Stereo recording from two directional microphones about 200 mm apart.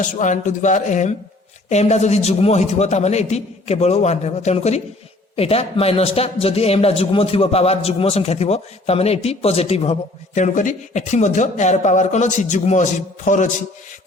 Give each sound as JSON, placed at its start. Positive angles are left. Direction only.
{"t": 0.0, "sound": "a man's voice", "side_deg": 40}